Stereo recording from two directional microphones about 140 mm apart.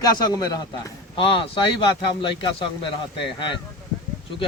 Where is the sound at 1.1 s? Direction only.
40° left (ahead or behind).